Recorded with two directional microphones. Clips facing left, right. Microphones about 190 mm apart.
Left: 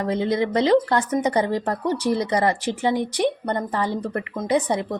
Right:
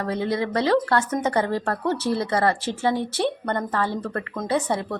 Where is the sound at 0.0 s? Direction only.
20° left (ahead or behind).